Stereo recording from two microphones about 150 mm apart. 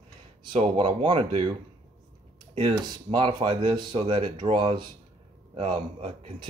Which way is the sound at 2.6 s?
35° right (ahead or behind).